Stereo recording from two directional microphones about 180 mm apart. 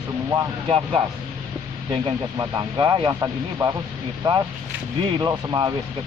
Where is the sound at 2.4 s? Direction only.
20° right (ahead or behind).